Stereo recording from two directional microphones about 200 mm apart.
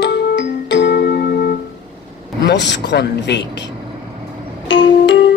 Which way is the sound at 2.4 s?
60° left (ahead or behind).